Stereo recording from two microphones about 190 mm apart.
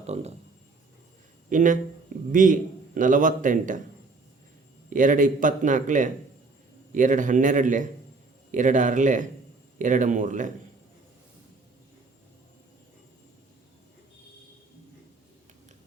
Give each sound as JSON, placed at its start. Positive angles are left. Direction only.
{"t": 0.0, "sound": "a man's voice", "side_deg": -35}
{"t": 1.5, "sound": "a man's voice", "side_deg": -45}
{"t": 4.9, "sound": "a man's voice", "side_deg": -40}